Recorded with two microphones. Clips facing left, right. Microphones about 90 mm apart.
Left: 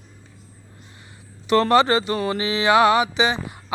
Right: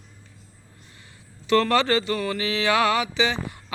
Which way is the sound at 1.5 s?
20° left (ahead or behind).